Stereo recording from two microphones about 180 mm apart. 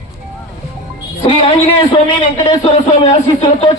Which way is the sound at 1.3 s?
30° left (ahead or behind).